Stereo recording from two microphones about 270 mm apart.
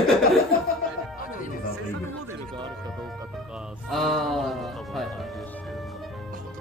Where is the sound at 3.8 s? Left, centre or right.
Centre.